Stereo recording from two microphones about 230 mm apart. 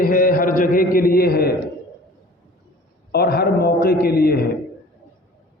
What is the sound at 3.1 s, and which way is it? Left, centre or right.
A man's voice, left.